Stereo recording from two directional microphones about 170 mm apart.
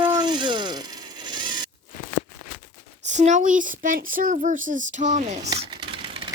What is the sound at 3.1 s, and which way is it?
Speech, 45° right (ahead or behind).